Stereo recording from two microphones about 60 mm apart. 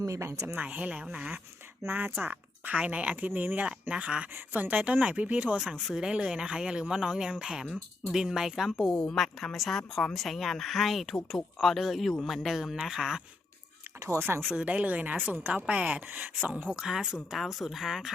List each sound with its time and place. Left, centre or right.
0.0 s speech: right
0.6 s speech: right
1.9 s speech: right
5.5 s speech: centre
8.9 s speech: centre
14.2 s speech: right
14.5 s speech: right
16.7 s speech: centre